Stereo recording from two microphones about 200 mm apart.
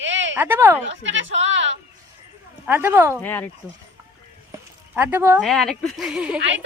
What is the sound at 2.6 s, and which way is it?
Speech, 10° right (ahead or behind).